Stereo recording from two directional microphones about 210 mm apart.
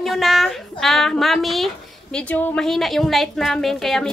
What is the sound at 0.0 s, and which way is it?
A woman's voice, centre (ahead or behind).